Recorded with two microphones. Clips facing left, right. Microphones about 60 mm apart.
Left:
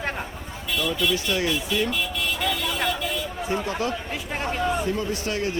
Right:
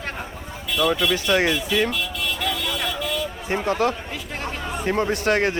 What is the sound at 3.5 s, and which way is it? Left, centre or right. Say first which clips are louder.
Speech: right 5 dB; right.